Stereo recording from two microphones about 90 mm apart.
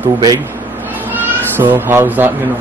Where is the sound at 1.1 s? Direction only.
20° right (ahead or behind).